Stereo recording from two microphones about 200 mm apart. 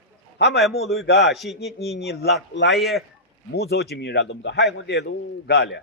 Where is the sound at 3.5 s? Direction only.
55° left (ahead or behind).